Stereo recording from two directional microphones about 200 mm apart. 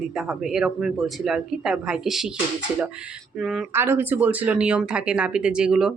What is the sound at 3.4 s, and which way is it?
A woman's voice, centre (ahead or behind).